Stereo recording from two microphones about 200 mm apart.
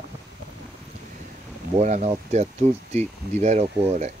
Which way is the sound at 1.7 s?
35° right (ahead or behind).